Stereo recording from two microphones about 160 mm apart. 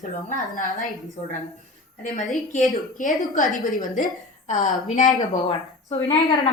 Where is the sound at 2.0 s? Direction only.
50° left (ahead or behind).